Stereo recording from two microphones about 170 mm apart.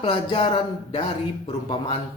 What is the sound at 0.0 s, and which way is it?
Speech, 30° left (ahead or behind).